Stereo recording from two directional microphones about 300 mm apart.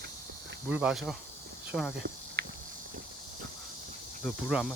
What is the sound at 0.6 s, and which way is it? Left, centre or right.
Cricket, centre.